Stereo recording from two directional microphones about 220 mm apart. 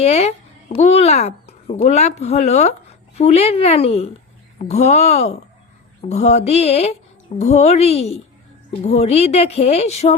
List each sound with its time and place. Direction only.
0.0 s speech: 30° left (ahead or behind)